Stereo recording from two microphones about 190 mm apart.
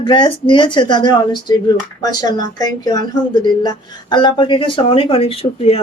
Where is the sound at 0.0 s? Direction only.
25° left (ahead or behind).